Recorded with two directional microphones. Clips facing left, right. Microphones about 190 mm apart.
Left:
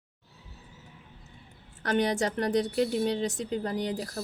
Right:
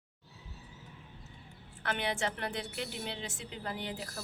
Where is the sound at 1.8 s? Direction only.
40° left (ahead or behind).